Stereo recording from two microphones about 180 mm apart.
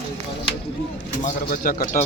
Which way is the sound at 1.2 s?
50° left (ahead or behind).